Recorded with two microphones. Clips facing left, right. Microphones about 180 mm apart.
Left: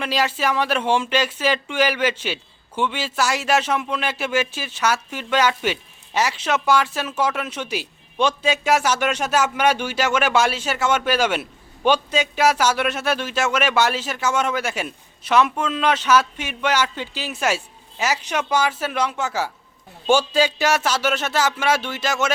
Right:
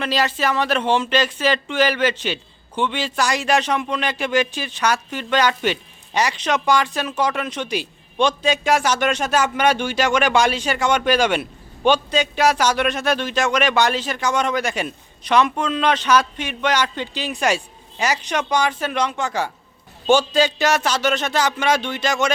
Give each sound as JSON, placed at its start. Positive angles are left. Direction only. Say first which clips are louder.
{"t": 0.0, "sound": "speech", "louder": "right 1 dB", "side_deg": 10}